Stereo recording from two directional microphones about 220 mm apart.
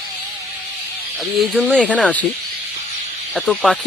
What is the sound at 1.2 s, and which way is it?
Speech, centre (ahead or behind).